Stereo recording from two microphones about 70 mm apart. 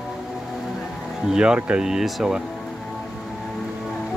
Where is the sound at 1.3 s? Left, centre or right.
Centre.